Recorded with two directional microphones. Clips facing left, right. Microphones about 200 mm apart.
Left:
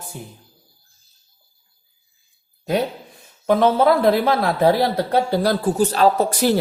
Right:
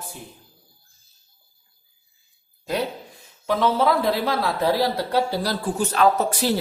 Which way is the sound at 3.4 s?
55° left (ahead or behind).